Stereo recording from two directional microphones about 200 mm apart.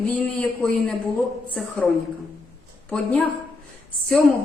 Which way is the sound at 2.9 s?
5° left (ahead or behind).